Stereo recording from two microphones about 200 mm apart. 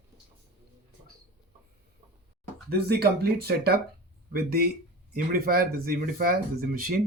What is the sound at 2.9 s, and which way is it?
Speech, 50° right (ahead or behind).